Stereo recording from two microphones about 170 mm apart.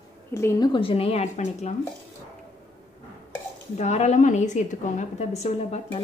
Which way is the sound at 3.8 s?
40° left (ahead or behind).